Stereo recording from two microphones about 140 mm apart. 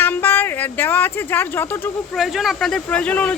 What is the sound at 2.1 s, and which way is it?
Speech, centre (ahead or behind).